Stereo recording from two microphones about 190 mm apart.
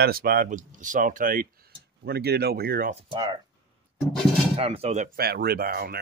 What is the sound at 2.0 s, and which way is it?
Speech, 55° right (ahead or behind).